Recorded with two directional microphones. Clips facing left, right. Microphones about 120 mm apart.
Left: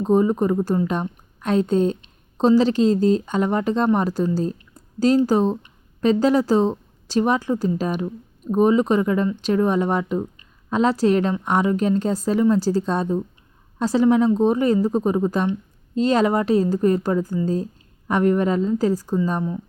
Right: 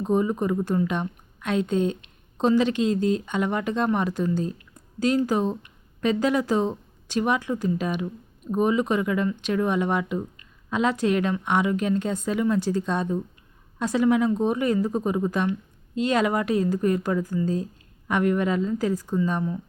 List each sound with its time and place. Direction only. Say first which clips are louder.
0.0 s a woman's voice: left 5 dB; 35° left (ahead or behind)